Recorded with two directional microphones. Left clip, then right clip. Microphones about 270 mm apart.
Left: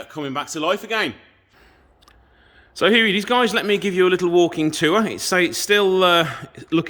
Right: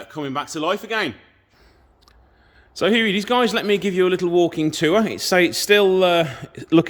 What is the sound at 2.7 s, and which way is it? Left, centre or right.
A man's voice, centre.